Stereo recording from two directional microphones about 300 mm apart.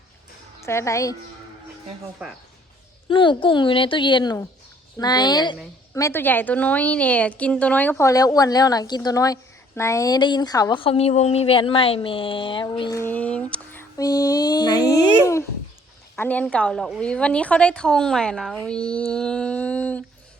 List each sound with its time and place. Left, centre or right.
0.6 s a woman's voice: centre
3.1 s a woman's voice: centre